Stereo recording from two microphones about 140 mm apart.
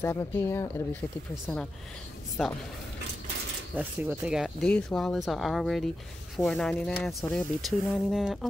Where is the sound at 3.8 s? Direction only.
10° right (ahead or behind).